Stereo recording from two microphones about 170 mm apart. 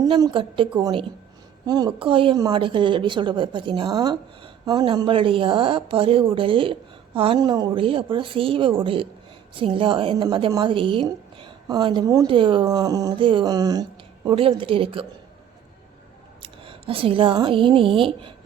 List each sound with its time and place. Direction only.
0.0 s a woman's voice: 25° right (ahead or behind)
16.4 s a woman's voice: 30° right (ahead or behind)